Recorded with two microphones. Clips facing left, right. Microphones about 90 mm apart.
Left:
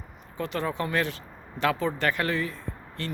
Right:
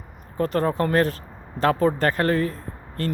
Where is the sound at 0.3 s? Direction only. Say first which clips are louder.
Right 7 dB; 40° right (ahead or behind).